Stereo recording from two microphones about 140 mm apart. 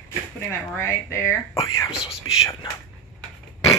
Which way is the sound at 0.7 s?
15° left (ahead or behind).